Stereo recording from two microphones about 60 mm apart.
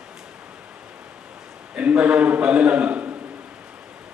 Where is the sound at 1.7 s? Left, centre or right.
Right.